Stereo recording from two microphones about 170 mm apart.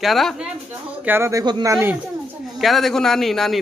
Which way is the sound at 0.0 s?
Centre (ahead or behind).